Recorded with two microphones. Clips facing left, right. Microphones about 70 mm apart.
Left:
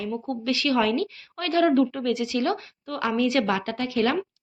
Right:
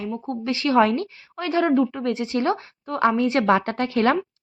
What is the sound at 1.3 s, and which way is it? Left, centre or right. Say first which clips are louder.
Speech: right 1 dB; right.